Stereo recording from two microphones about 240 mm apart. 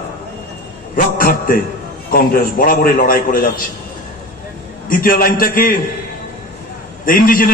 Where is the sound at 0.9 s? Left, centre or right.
Left.